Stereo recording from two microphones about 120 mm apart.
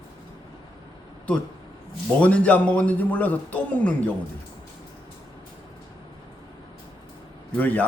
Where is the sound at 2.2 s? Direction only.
10° left (ahead or behind).